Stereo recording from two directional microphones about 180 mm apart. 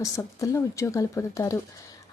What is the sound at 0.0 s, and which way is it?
A woman's voice, 15° left (ahead or behind).